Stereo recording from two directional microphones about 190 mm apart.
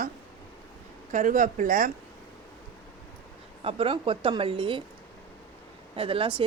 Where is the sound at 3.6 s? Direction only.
30° right (ahead or behind).